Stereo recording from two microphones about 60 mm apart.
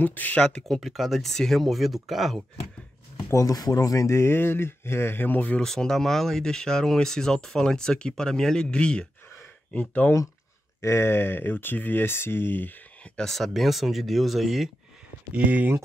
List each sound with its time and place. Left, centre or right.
0.0 s speech: left
0.4 s speech: centre
0.7 s speech: centre
3.3 s speech: left
5.6 s speech: centre
9.8 s speech: left
10.8 s speech: left
13.2 s speech: centre
15.3 s speech: right